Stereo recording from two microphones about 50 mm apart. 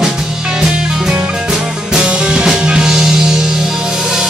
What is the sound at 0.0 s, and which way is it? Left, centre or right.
Music, centre.